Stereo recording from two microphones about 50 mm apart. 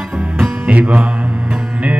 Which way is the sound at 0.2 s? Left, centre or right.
Right.